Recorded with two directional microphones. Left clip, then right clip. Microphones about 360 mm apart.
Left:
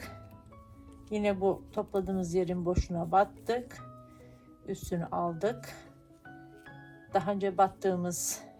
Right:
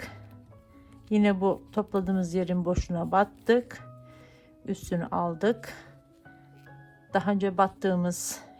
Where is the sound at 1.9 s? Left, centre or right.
Right.